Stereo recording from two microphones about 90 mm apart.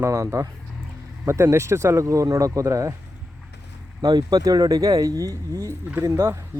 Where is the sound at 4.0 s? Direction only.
50° right (ahead or behind); by 6.4 s 30° right (ahead or behind).